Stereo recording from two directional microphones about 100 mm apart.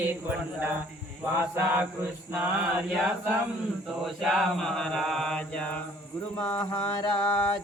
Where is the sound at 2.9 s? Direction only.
Centre (ahead or behind); by 6.6 s 15° left (ahead or behind).